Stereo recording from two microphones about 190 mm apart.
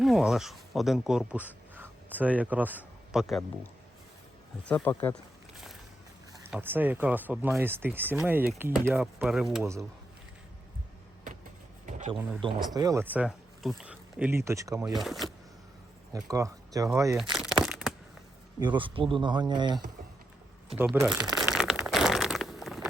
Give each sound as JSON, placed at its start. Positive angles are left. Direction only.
{"t": 0.0, "sound": "speech", "side_deg": 0}
{"t": 1.7, "sound": "a sound", "side_deg": -10}
{"t": 4.7, "sound": "speech", "side_deg": 10}
{"t": 6.3, "sound": "speech", "side_deg": -5}
{"t": 12.1, "sound": "speech", "side_deg": -10}
{"t": 14.9, "sound": "speech", "side_deg": 0}
{"t": 16.1, "sound": "speech", "side_deg": -20}
{"t": 17.3, "sound": "a sound", "side_deg": 0}
{"t": 18.6, "sound": "speech", "side_deg": -25}
{"t": 20.7, "sound": "crumpling", "side_deg": -10}